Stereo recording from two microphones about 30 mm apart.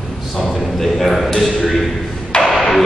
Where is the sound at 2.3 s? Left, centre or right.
Left.